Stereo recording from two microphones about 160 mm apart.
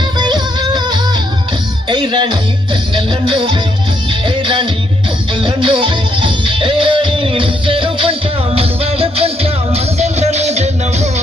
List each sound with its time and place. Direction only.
0.2 s music: 30° right (ahead or behind); by 11.1 s 45° right (ahead or behind)